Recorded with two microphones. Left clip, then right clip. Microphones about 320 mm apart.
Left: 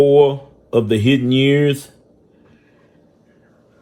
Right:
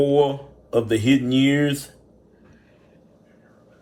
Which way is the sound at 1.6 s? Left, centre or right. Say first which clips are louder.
Left 6 dB; left.